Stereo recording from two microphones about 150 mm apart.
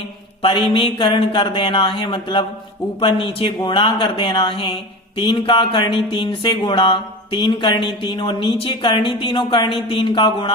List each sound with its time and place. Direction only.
0.4 s speech: 35° left (ahead or behind)